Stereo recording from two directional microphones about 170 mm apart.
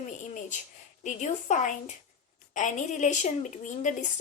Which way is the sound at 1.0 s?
45° left (ahead or behind).